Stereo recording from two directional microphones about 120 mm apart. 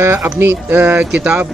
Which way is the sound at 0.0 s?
20° right (ahead or behind).